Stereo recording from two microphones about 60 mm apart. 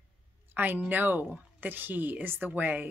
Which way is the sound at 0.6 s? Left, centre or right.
Right.